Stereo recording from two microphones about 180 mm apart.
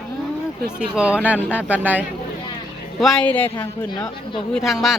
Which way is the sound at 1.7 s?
10° right (ahead or behind).